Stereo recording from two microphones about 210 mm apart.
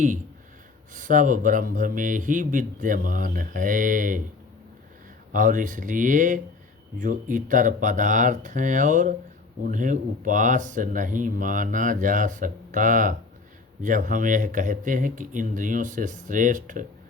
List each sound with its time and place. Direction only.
0.9 s speech: 40° right (ahead or behind)
5.3 s speech: 40° right (ahead or behind)